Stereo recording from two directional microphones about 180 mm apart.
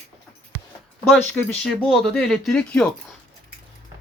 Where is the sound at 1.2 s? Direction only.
10° left (ahead or behind).